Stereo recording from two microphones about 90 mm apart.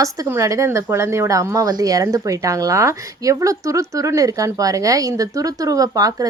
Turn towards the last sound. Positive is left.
turn(degrees=-45)  # may be behind; listen again after turning